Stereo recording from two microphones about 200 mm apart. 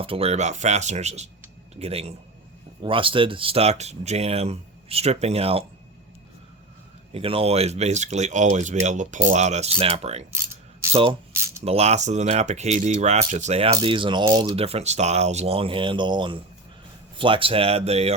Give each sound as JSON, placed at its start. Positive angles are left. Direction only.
{"t": 0.0, "sound": "speech", "side_deg": -30}
{"t": 7.1, "sound": "speech", "side_deg": -30}
{"t": 11.3, "sound": "a sound", "side_deg": -15}
{"t": 11.6, "sound": "speech", "side_deg": -30}